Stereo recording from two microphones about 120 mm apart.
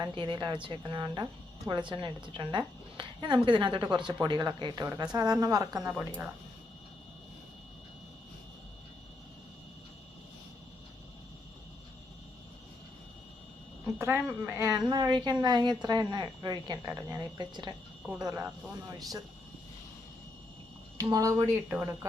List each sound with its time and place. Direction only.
0.0 s a woman's voice: 40° right (ahead or behind)
5.8 s speech: 15° right (ahead or behind)
14.0 s a woman's voice: 20° right (ahead or behind)
14.6 s a woman's voice: 35° right (ahead or behind)
21.0 s a woman's voice: 30° right (ahead or behind)
21.7 s speech: 15° right (ahead or behind)